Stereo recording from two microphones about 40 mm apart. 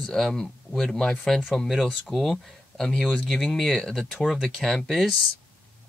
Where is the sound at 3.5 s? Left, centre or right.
Centre.